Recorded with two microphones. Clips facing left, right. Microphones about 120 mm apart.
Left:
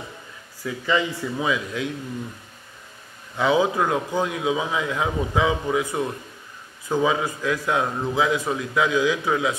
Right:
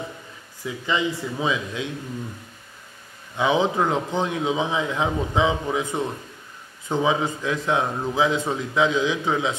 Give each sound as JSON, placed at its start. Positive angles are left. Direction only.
{"t": 0.7, "sound": "a man's voice", "side_deg": -20}
{"t": 3.3, "sound": "a man's voice", "side_deg": -20}